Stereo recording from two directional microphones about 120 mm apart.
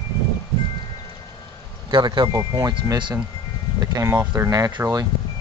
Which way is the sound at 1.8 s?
40° right (ahead or behind).